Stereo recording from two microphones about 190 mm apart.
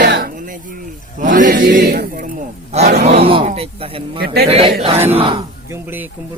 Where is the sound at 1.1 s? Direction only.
40° right (ahead or behind).